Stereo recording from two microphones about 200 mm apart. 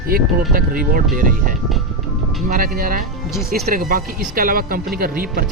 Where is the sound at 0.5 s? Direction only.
45° right (ahead or behind).